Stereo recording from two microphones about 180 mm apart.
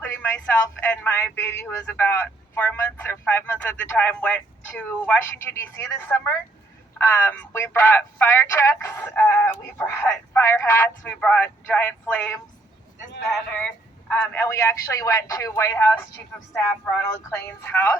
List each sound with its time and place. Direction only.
0.0 s speech: 10° left (ahead or behind)
17.3 s speech: 10° left (ahead or behind)